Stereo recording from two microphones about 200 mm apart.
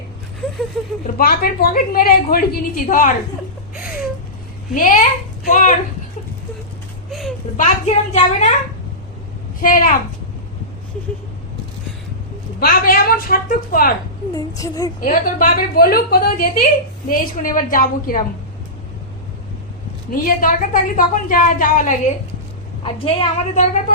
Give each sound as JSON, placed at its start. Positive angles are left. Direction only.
{"t": 1.0, "sound": "a woman's voice", "side_deg": 45}
{"t": 3.8, "sound": "a sound", "side_deg": -5}
{"t": 4.7, "sound": "a woman's voice", "side_deg": 40}
{"t": 7.1, "sound": "a sound", "side_deg": 0}
{"t": 7.5, "sound": "a woman's voice", "side_deg": 35}
{"t": 9.6, "sound": "a woman's voice", "side_deg": 45}
{"t": 12.5, "sound": "a woman's voice", "side_deg": 50}
{"t": 14.3, "sound": "a woman's voice", "side_deg": 15}
{"t": 15.0, "sound": "a woman's voice", "side_deg": 45}
{"t": 20.1, "sound": "a woman's voice", "side_deg": 45}
{"t": 22.8, "sound": "a woman's voice", "side_deg": 30}